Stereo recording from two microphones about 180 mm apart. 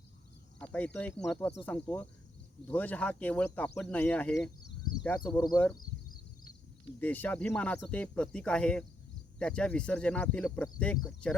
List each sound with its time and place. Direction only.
0.6 s speech: 10° left (ahead or behind)
5.3 s speech: 25° left (ahead or behind)
5.7 s a sound: 50° left (ahead or behind)
7.0 s speech: 10° left (ahead or behind)